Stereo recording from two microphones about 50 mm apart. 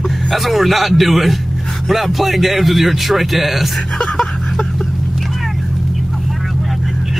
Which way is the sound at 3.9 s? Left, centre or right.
Centre.